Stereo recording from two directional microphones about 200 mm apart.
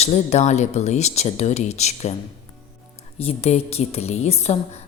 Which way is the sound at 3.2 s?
30° left (ahead or behind).